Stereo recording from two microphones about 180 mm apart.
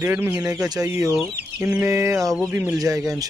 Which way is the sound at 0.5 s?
20° right (ahead or behind).